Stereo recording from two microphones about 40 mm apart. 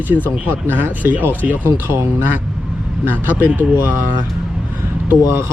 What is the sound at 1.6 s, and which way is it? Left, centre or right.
Speech, right.